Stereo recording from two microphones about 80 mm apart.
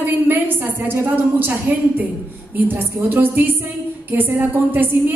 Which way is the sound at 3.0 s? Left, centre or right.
Right.